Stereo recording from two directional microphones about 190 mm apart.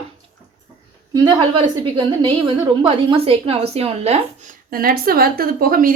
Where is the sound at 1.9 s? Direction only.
25° right (ahead or behind).